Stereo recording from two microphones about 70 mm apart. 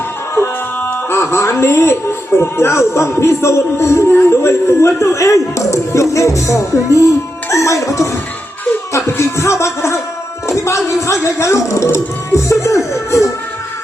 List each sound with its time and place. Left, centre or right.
1.1 s speech: left
7.5 s music: left
8.9 s speech: left